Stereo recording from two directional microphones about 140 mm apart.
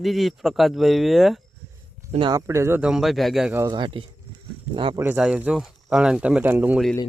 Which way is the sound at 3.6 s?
35° right (ahead or behind).